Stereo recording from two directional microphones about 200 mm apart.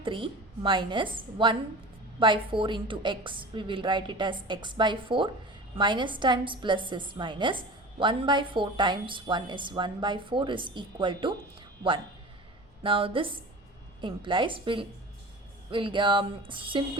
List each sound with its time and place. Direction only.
0.0 s a woman's voice: 25° right (ahead or behind)
12.8 s a woman's voice: 25° right (ahead or behind)